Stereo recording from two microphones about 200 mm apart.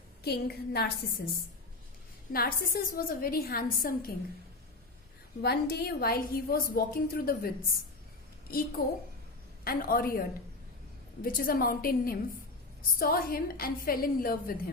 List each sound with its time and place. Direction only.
0.3 s a woman's voice: 50° left (ahead or behind)
2.3 s a woman's voice: 50° left (ahead or behind)
5.4 s a woman's voice: 50° left (ahead or behind)
8.8 s a woman's voice: 45° left (ahead or behind)